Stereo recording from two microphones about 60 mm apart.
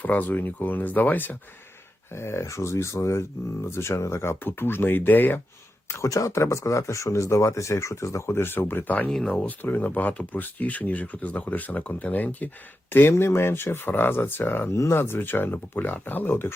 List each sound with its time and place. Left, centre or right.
0.0 s speech: left
2.1 s speech: left
6.0 s speech: left
9.0 s speech: centre
9.5 s speech: left
12.9 s speech: left